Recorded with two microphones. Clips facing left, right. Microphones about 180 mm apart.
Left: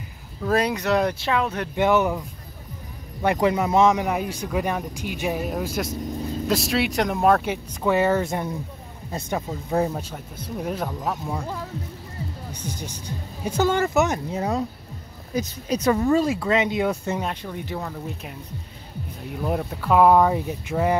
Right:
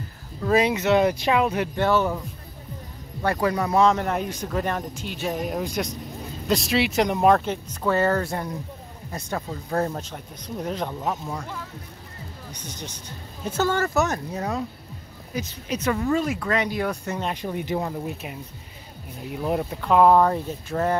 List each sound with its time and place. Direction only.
0.4 s speech: centre (ahead or behind)
1.8 s speech: 15° left (ahead or behind)
12.5 s speech: 10° left (ahead or behind); by 14.6 s 25° left (ahead or behind)
15.3 s speech: 40° left (ahead or behind); by 16.9 s 20° left (ahead or behind)
17.3 s speech: 15° right (ahead or behind)
19.4 s speech: centre (ahead or behind)